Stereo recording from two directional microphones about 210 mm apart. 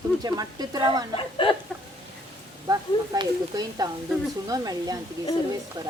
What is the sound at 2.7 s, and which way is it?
Speech, 20° right (ahead or behind).